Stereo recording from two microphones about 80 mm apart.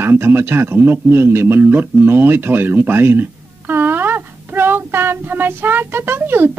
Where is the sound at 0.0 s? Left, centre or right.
Right.